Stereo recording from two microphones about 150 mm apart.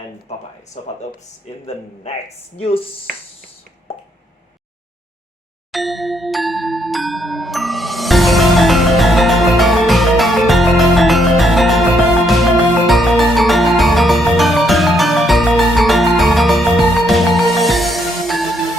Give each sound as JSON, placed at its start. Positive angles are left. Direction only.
{"t": 2.6, "sound": "speech", "side_deg": 40}
{"t": 5.7, "sound": "glockenspiel", "side_deg": 0}
{"t": 12.9, "sound": "music", "side_deg": 0}